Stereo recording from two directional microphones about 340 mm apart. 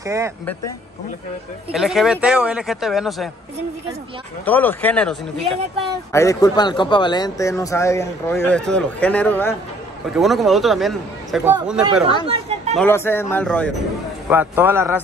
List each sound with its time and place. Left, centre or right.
0.0 s speech: centre
1.7 s speech: centre
4.5 s a man's voice: centre
12.3 s a sound: centre
12.7 s speech: centre